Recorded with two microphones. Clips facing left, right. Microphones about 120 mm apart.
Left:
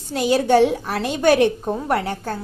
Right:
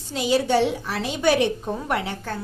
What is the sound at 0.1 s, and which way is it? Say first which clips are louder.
A woman's voice: left 4 dB; 50° left (ahead or behind).